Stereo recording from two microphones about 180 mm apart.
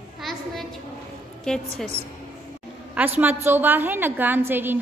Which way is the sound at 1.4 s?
5° left (ahead or behind).